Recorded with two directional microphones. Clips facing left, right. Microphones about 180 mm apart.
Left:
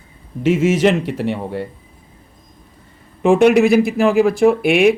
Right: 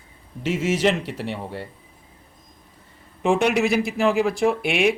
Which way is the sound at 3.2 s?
55° left (ahead or behind).